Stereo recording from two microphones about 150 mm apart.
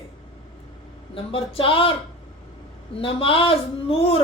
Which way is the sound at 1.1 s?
40° left (ahead or behind).